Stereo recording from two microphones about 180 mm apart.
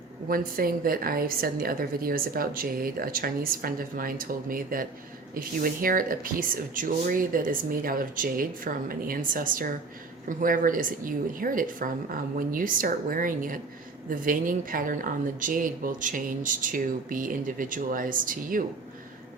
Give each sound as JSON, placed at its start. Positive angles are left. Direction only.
{"t": 0.3, "sound": "a woman's voice", "side_deg": -55}